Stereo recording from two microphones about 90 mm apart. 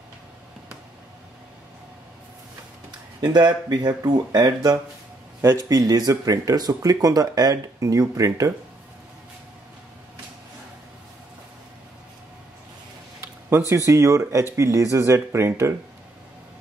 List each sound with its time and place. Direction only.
3.2 s speech: 50° right (ahead or behind)
13.2 s speech: 30° right (ahead or behind)